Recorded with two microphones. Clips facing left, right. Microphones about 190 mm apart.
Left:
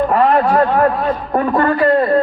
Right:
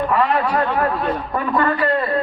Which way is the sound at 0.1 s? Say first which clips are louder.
Left 5 dB; 45° left (ahead or behind).